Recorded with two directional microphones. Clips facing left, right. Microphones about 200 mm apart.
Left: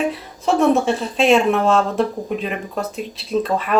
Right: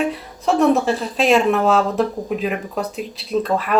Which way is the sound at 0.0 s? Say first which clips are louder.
Even; centre (ahead or behind).